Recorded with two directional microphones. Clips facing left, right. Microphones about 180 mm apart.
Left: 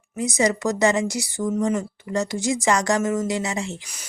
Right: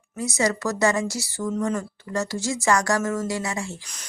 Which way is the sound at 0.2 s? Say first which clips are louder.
Left 3 dB; 20° left (ahead or behind).